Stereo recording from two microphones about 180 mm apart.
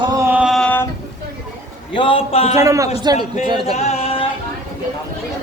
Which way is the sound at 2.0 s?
30° left (ahead or behind).